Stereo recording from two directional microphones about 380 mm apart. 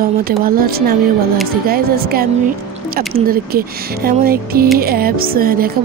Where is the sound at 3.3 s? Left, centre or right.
Right.